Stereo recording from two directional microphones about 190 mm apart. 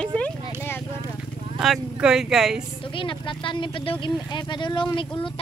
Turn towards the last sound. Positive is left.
turn(degrees=25)  # may be behind; listen again after turning